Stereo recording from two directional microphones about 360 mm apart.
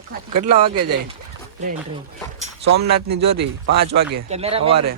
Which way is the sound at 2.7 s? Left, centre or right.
Right.